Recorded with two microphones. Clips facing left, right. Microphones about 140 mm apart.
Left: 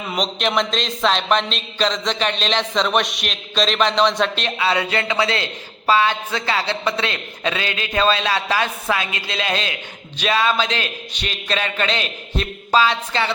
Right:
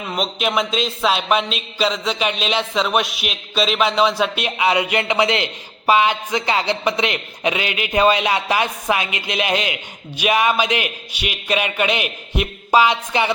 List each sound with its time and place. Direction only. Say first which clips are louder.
0.1 s a man's voice: even; 5° right (ahead or behind)